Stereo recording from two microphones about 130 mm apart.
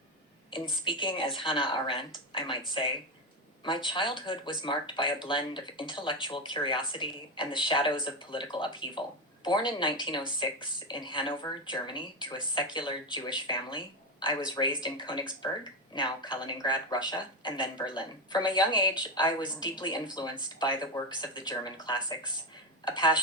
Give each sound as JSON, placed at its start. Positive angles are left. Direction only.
{"t": 0.9, "sound": "speech", "side_deg": 35}